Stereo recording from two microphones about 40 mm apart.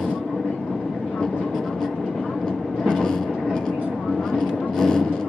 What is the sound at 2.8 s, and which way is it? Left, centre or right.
Vehicle, left.